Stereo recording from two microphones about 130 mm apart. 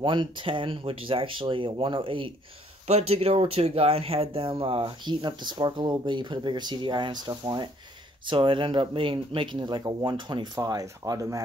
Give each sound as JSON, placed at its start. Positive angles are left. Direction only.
{"t": 0.0, "sound": "speech", "side_deg": -40}